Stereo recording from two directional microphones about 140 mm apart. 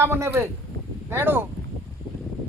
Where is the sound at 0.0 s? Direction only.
15° right (ahead or behind).